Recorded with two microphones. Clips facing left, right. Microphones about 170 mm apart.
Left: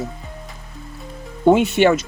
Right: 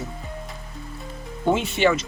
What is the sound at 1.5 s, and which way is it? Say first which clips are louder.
Speech: left 6 dB; 60° left (ahead or behind).